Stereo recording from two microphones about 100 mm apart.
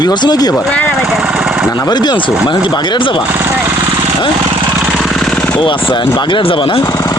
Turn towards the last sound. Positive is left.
turn(degrees=60)  # may be behind; listen again after turning